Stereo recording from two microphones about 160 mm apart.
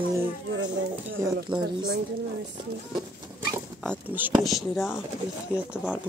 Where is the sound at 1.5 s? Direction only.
30° right (ahead or behind).